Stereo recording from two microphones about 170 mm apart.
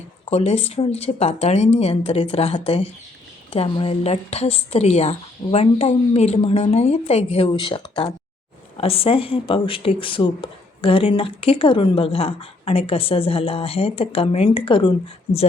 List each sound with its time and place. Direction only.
0.3 s speech: 40° left (ahead or behind)